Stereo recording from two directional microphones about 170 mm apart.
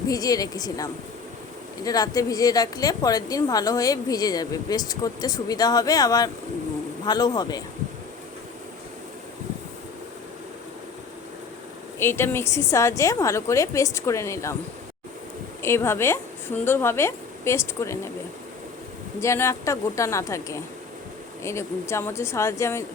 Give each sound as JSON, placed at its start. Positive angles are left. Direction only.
{"t": 0.1, "sound": "a woman's voice", "side_deg": 20}
{"t": 11.9, "sound": "a woman's voice", "side_deg": 15}
{"t": 15.6, "sound": "a woman's voice", "side_deg": 15}
{"t": 19.2, "sound": "a woman's voice", "side_deg": 15}